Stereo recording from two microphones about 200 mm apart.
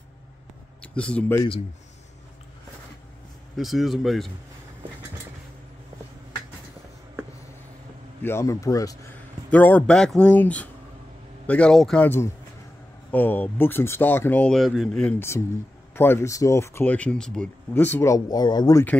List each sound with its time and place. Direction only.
0.9 s speech: 5° left (ahead or behind)
3.5 s speech: centre (ahead or behind)
8.2 s speech: 10° left (ahead or behind)